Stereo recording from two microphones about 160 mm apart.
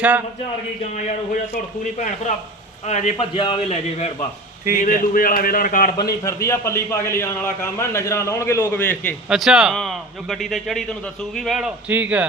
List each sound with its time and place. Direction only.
1.8 s a man's voice: 50° left (ahead or behind)
3.3 s a man's voice: 30° left (ahead or behind)
4.8 s a man's voice: 60° left (ahead or behind)
6.0 s a man's voice: 20° left (ahead or behind)
9.3 s a man's voice: 5° right (ahead or behind)